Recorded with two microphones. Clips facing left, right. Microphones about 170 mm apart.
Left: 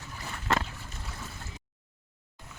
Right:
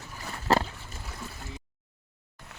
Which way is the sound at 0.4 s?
35° right (ahead or behind).